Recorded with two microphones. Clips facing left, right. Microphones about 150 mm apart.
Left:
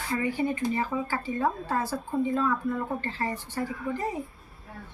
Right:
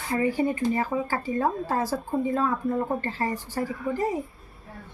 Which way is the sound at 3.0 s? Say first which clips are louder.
Right 3 dB; 40° right (ahead or behind).